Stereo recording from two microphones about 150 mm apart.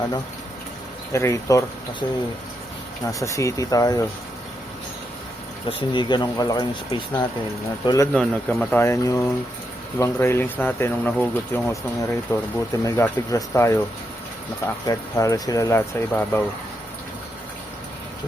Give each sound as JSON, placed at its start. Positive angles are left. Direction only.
{"t": 1.1, "sound": "speech", "side_deg": 20}
{"t": 3.1, "sound": "speech", "side_deg": 20}
{"t": 5.6, "sound": "speech", "side_deg": 30}
{"t": 7.9, "sound": "speech", "side_deg": 20}
{"t": 8.1, "sound": "speech", "side_deg": 5}
{"t": 8.8, "sound": "speech", "side_deg": 20}